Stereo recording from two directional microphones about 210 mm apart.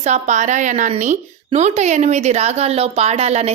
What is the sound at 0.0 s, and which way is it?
Speech, 35° right (ahead or behind).